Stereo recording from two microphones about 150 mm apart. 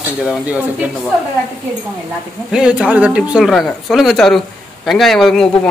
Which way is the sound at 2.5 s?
5° right (ahead or behind).